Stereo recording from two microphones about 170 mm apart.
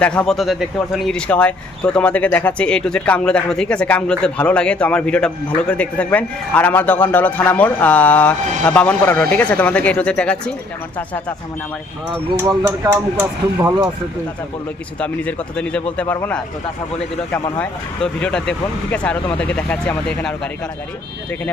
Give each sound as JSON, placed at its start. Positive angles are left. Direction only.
{"t": 0.0, "sound": "speech", "side_deg": 5}
{"t": 12.6, "sound": "speech", "side_deg": -15}
{"t": 14.9, "sound": "speech", "side_deg": 10}
{"t": 17.6, "sound": "speech", "side_deg": 5}